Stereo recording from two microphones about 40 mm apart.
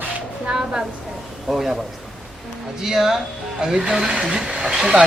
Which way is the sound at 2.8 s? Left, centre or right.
Centre.